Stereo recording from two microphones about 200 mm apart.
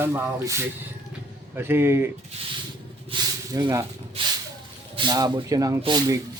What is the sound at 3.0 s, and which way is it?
Snake, 25° right (ahead or behind).